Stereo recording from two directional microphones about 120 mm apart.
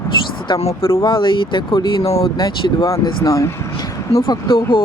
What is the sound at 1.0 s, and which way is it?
Speech, 45° left (ahead or behind).